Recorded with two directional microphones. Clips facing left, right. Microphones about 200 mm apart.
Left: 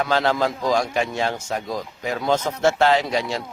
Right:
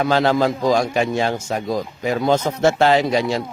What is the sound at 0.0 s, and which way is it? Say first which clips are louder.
Speech: right 4 dB; 15° right (ahead or behind).